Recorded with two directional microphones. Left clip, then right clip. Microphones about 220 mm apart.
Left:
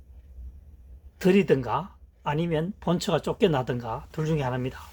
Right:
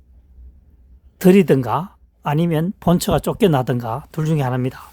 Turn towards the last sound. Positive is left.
turn(degrees=-55)  # may be behind; listen again after turning